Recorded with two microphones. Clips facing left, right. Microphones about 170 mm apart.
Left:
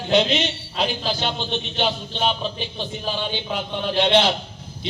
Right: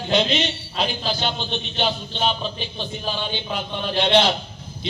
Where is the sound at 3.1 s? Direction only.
20° left (ahead or behind).